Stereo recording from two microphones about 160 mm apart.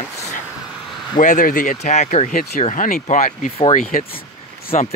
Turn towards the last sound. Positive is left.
turn(degrees=50)  # may be behind; listen again after turning